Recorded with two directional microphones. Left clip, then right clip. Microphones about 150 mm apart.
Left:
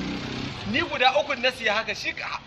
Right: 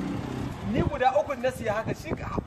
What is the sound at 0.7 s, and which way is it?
Speech, 25° right (ahead or behind).